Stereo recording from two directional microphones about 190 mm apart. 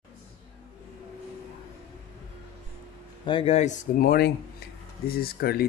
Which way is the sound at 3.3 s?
30° left (ahead or behind).